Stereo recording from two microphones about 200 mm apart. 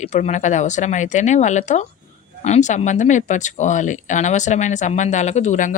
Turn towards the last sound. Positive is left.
turn(degrees=40)  # may be behind; listen again after turning